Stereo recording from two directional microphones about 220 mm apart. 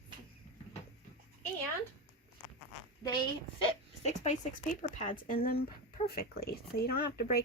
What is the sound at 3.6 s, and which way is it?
Speech, 25° left (ahead or behind).